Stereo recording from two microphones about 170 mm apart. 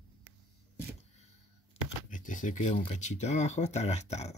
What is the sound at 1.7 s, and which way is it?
Shuffling cards, 50° left (ahead or behind).